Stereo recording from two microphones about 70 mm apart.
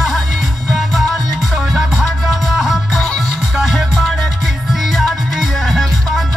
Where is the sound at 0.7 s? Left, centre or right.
Centre.